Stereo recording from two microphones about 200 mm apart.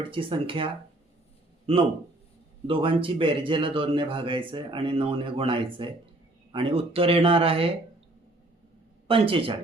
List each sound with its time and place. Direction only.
0.1 s a man's voice: 25° right (ahead or behind)
2.6 s a man's voice: 25° right (ahead or behind)
9.0 s a man's voice: 25° right (ahead or behind)